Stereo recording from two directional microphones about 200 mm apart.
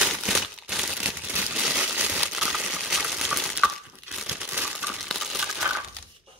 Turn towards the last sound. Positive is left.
turn(degrees=0)  # may be behind; listen again after turning